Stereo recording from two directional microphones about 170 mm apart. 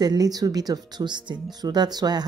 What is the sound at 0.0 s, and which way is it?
Speech, 25° right (ahead or behind).